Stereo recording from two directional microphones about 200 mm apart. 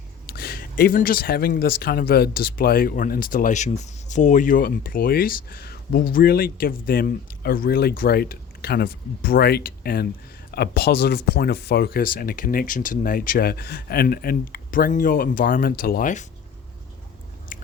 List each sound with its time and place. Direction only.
0.3 s speech: 50° left (ahead or behind)
17.5 s chewing: 40° left (ahead or behind)